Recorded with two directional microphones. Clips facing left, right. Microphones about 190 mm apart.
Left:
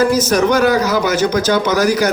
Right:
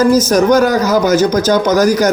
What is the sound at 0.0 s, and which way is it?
A man's voice, 40° right (ahead or behind).